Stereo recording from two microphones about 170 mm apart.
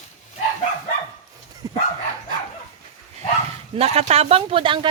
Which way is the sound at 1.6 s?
25° right (ahead or behind).